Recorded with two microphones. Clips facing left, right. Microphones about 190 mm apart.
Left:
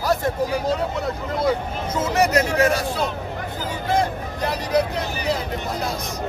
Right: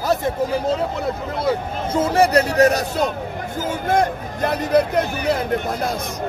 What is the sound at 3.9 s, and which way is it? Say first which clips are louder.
Speech: right 2 dB; 50° right (ahead or behind).